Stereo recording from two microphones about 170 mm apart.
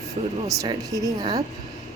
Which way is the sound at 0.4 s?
20° right (ahead or behind).